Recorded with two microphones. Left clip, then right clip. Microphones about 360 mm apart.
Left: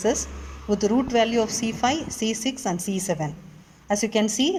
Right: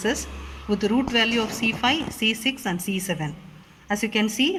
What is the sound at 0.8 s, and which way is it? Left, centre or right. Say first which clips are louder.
A woman's voice: left 1 dB; centre.